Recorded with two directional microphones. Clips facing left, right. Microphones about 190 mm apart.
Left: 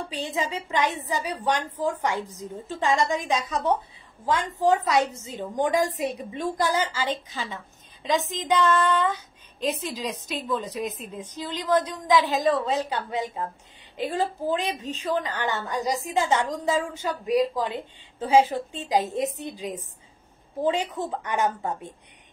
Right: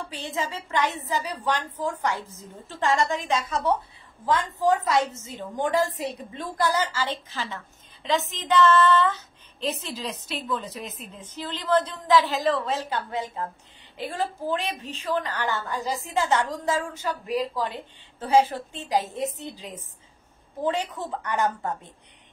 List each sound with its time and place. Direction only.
0.1 s a woman's voice: 15° left (ahead or behind)